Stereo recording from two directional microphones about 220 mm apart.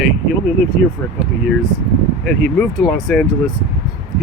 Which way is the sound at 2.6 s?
5° left (ahead or behind).